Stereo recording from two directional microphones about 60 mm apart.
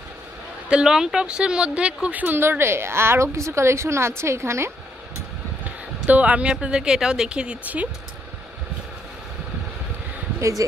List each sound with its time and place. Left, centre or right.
0.7 s speech: centre
2.2 s a woman's voice: right
6.0 s speech: right